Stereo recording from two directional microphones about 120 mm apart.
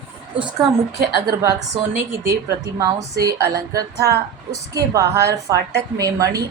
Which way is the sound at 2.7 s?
30° right (ahead or behind).